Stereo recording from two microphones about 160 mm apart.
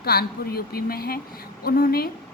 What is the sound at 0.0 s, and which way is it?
A woman's voice, 75° left (ahead or behind).